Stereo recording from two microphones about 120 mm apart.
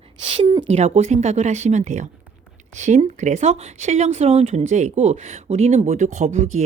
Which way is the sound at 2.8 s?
85° right.